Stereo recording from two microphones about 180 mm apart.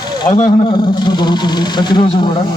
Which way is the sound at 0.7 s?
25° left (ahead or behind).